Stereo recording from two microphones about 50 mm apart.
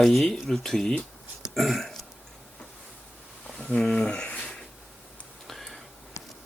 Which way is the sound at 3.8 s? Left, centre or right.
Centre.